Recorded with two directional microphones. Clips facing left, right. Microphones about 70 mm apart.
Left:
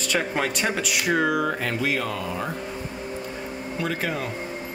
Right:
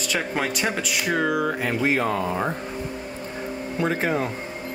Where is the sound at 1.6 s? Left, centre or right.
Centre.